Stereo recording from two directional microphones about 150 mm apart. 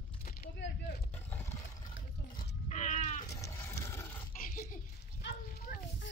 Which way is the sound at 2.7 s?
55° left (ahead or behind).